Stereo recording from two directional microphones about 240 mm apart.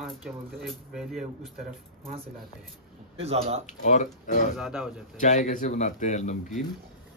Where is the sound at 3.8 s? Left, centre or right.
Left.